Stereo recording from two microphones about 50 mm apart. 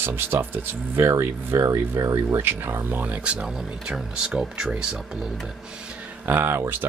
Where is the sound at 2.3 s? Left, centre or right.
Right.